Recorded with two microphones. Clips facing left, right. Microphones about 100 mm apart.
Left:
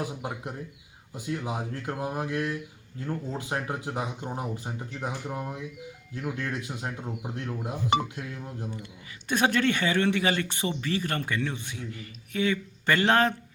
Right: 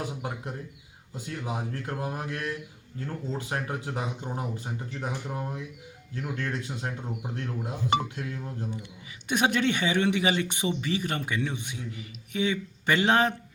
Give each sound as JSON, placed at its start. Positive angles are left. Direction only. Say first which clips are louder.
{"t": 0.2, "sound": "speech", "louder": "even", "side_deg": 15}
{"t": 9.3, "sound": "speech", "louder": "left 1 dB", "side_deg": -15}